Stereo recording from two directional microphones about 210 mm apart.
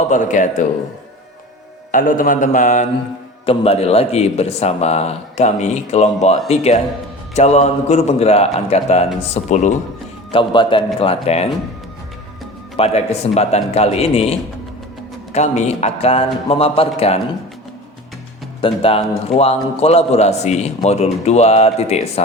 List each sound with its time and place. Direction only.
0.1 s a man's voice: 35° left (ahead or behind)
1.9 s a man's voice: 40° left (ahead or behind)
10.3 s a man's voice: 25° left (ahead or behind)
12.7 s a man's voice: 30° left (ahead or behind)
18.6 s a man's voice: 25° left (ahead or behind)